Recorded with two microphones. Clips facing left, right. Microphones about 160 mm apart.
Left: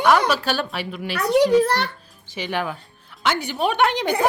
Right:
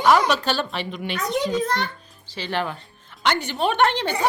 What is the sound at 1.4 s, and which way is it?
Speech, 70° left (ahead or behind).